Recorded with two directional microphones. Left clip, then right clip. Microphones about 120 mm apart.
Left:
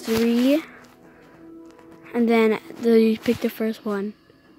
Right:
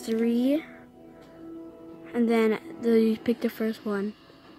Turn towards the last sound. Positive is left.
turn(degrees=15)  # may be behind; listen again after turning